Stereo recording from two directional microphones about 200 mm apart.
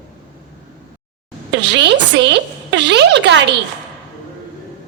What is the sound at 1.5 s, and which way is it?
A woman's voice, 60° right (ahead or behind).